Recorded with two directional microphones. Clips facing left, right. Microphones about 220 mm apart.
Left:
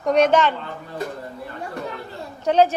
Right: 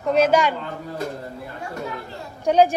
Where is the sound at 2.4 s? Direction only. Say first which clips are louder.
Right 1 dB; 10° right (ahead or behind).